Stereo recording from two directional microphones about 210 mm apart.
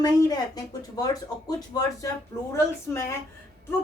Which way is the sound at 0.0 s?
20° left (ahead or behind).